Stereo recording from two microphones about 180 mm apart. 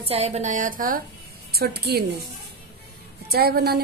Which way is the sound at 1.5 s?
60° right (ahead or behind).